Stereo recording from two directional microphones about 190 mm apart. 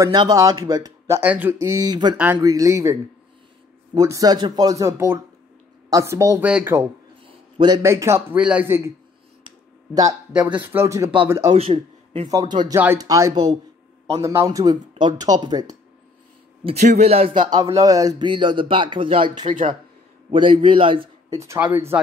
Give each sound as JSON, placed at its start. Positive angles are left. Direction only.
{"t": 0.0, "sound": "speech", "side_deg": -20}
{"t": 7.2, "sound": "a man's voice", "side_deg": -25}
{"t": 10.3, "sound": "speech", "side_deg": -10}
{"t": 11.5, "sound": "speech", "side_deg": -30}
{"t": 16.6, "sound": "a man's voice", "side_deg": -35}
{"t": 21.4, "sound": "speech", "side_deg": -10}